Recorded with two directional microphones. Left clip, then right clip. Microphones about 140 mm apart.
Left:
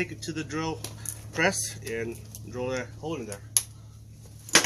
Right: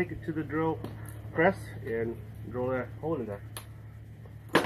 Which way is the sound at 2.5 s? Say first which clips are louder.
Even; 20° left (ahead or behind).